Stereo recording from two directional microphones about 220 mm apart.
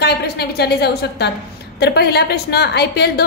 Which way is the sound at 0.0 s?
45° left (ahead or behind).